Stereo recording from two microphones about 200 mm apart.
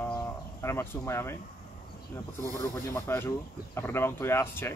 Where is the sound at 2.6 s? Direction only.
10° left (ahead or behind).